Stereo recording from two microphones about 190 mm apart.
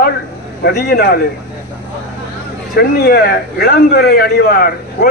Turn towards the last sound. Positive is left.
turn(degrees=50)  # may be behind; listen again after turning